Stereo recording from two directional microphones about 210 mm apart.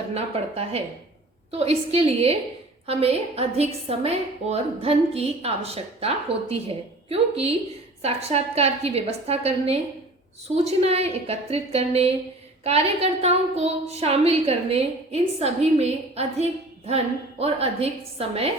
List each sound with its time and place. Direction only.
0.1 s a woman's voice: 30° right (ahead or behind)